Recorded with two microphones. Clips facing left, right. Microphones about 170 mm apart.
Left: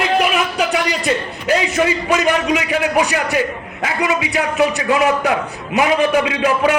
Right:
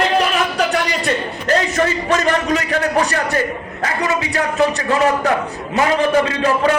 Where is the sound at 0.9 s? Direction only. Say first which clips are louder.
Left 1 dB; 5° left (ahead or behind).